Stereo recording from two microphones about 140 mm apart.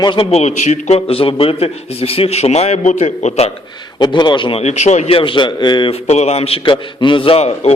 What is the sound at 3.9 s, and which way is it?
A man's voice, 35° left (ahead or behind).